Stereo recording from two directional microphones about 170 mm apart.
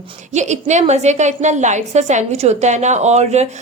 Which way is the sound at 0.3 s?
45° right (ahead or behind).